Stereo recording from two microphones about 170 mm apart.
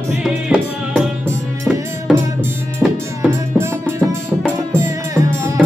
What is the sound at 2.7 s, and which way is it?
Music, 15° right (ahead or behind).